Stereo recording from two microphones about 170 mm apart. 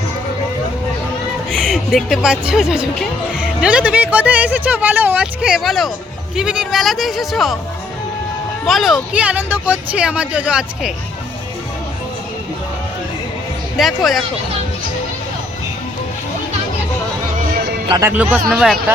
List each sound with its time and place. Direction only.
1.5 s speech: 5° left (ahead or behind)
8.6 s speech: centre (ahead or behind)
13.7 s speech: centre (ahead or behind)
17.3 s music: 55° right (ahead or behind)
18.0 s speech: 10° right (ahead or behind)